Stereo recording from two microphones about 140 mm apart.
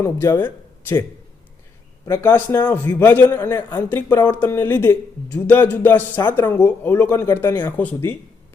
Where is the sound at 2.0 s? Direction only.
15° left (ahead or behind).